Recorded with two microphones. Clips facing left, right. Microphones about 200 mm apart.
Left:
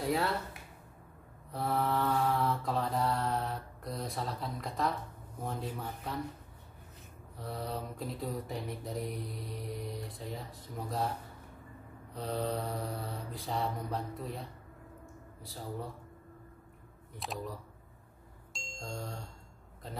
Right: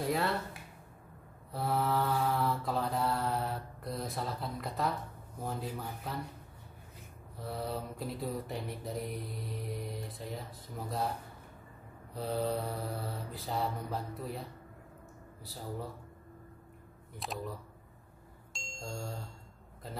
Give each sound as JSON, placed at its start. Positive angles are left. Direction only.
{"t": 0.0, "sound": "speech", "side_deg": 0}
{"t": 1.5, "sound": "mantra", "side_deg": 0}
{"t": 7.3, "sound": "mantra", "side_deg": 0}
{"t": 12.1, "sound": "mantra", "side_deg": -5}
{"t": 17.1, "sound": "speech", "side_deg": 0}
{"t": 18.5, "sound": "music", "side_deg": 0}